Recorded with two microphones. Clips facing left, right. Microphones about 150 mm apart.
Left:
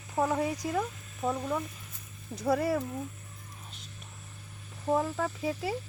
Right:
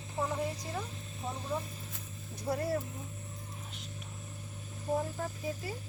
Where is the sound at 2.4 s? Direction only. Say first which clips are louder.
Left 5 dB; 90° left.